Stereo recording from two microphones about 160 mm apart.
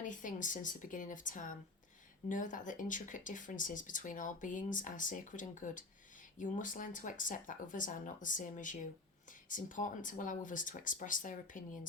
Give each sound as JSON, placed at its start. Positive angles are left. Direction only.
{"t": 0.0, "sound": "a woman's voice", "side_deg": 55}